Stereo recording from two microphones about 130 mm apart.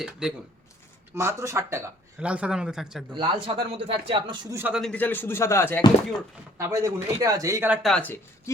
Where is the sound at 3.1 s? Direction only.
40° right (ahead or behind).